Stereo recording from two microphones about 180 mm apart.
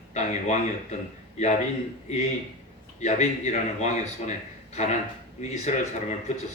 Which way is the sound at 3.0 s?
40° left (ahead or behind).